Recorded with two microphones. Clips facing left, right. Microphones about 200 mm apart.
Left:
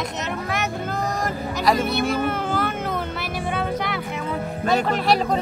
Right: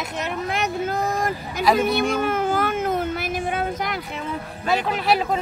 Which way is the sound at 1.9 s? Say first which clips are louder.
Right 1 dB; 50° right (ahead or behind).